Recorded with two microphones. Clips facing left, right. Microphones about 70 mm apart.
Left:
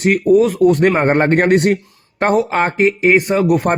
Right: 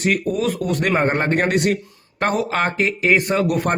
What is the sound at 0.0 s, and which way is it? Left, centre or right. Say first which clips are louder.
A man's voice: left 8 dB; left.